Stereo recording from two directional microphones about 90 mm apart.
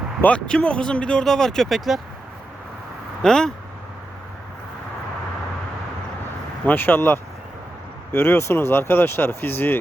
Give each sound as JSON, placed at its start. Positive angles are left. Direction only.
{"t": 0.2, "sound": "speech", "side_deg": 15}
{"t": 3.2, "sound": "speech", "side_deg": 5}
{"t": 6.7, "sound": "speech", "side_deg": 25}